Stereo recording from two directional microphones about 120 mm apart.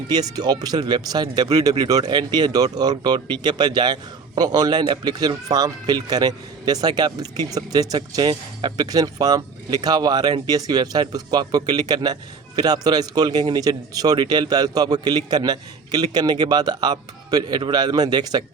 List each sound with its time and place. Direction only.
0.1 s speech: 35° right (ahead or behind)